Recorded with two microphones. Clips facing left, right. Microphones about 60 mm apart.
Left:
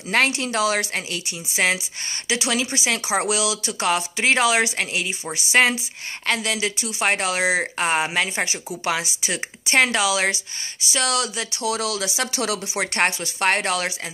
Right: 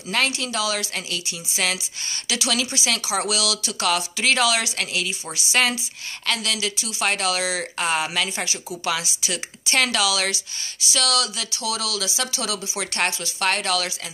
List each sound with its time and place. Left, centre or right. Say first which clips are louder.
0.1 s speech: left 3 dB; left